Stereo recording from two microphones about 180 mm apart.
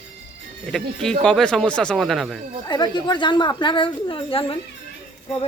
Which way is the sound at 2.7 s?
25° left (ahead or behind).